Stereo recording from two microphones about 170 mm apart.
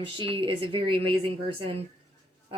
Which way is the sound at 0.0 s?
30° right (ahead or behind).